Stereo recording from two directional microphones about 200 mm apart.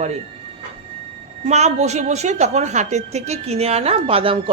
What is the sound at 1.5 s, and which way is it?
A woman's voice, 35° right (ahead or behind).